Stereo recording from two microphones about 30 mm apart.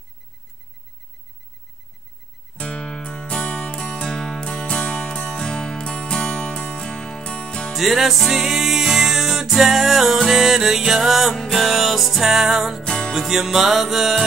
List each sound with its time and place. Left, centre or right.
2.5 s music: left
3.8 s music: left
4.8 s music: left
5.3 s music: left
7.7 s music: centre
12.8 s music: left
13.1 s music: centre